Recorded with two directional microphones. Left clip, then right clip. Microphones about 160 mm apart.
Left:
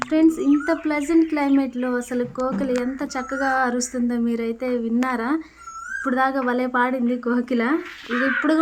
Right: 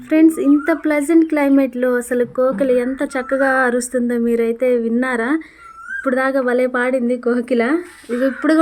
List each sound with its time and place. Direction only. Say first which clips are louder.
0.1 s speech: right 6 dB; 20° right (ahead or behind)